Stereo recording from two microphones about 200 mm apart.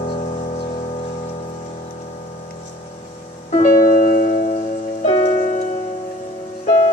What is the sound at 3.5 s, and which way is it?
Music, 35° left (ahead or behind).